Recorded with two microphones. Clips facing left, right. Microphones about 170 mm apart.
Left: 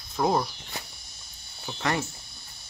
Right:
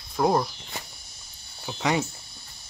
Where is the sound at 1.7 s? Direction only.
15° right (ahead or behind).